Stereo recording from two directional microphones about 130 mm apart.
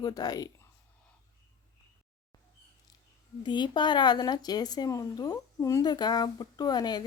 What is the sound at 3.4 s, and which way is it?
Speech, 35° left (ahead or behind).